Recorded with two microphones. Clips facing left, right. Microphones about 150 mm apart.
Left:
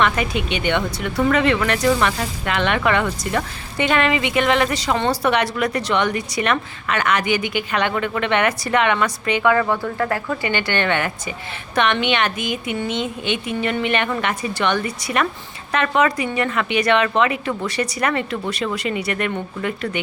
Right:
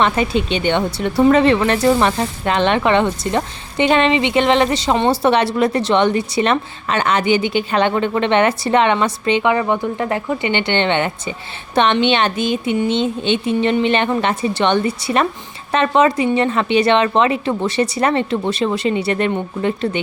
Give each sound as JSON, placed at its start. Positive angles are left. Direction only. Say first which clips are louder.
{"t": 0.0, "sound": "speech", "louder": "right 3 dB", "side_deg": -30}